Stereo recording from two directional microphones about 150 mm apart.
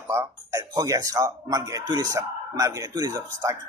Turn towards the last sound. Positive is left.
turn(degrees=-25)  # may be behind; listen again after turning